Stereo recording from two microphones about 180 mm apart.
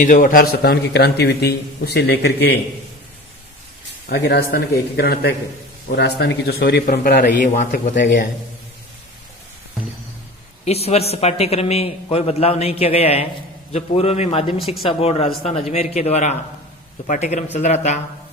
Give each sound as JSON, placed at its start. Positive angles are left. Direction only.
{"t": 0.0, "sound": "a man's voice", "side_deg": 50}
{"t": 4.1, "sound": "a man's voice", "side_deg": 65}
{"t": 10.7, "sound": "a man's voice", "side_deg": 35}